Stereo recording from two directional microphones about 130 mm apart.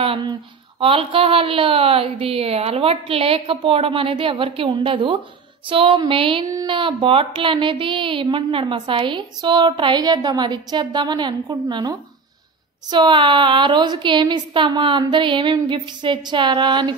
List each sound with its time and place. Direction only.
0.0 s speech: 40° right (ahead or behind)
6.4 s speech: 30° right (ahead or behind)